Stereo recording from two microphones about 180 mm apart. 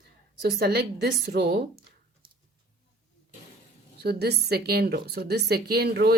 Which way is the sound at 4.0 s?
65° right (ahead or behind).